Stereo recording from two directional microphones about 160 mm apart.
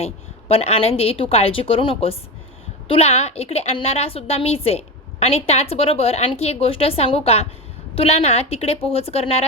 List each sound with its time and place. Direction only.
0.0 s a woman's voice: 40° left (ahead or behind)